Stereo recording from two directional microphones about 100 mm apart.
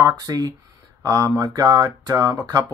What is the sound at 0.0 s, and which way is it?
Speech, 40° right (ahead or behind).